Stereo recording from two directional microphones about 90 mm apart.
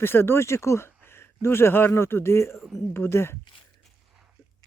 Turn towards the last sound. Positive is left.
turn(degrees=25)  # may be behind; listen again after turning